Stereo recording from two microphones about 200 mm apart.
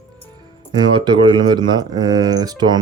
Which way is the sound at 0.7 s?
20° right (ahead or behind).